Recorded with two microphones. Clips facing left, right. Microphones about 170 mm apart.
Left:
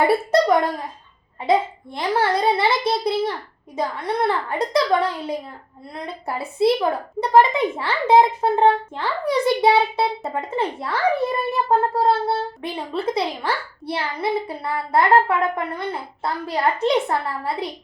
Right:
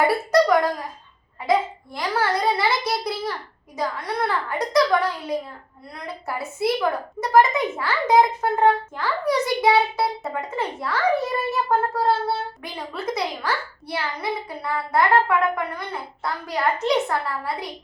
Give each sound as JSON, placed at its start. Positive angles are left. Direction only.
{"t": 0.3, "sound": "a woman's voice", "side_deg": 25}